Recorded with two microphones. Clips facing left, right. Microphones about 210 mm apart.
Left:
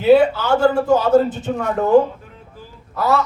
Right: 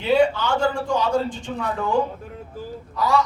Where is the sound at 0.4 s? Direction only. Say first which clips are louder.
Left 6 dB; 60° left (ahead or behind).